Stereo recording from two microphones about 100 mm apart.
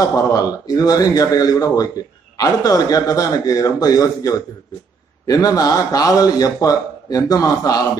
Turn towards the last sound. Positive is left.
turn(degrees=40)  # may be behind; listen again after turning